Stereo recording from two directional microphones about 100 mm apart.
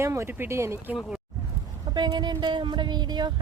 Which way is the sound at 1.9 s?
45° right (ahead or behind).